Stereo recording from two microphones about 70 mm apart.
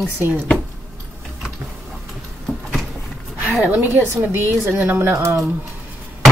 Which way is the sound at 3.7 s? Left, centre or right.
Right.